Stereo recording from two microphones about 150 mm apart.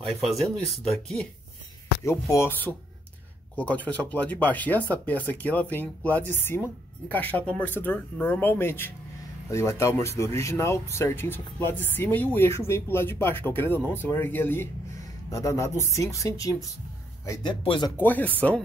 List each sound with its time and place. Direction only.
0.4 s speech: centre (ahead or behind)
2.0 s speech: 20° left (ahead or behind)
17.9 s speech: 10° left (ahead or behind)